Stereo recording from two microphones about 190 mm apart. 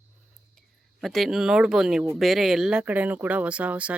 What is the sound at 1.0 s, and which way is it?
Speech, centre (ahead or behind).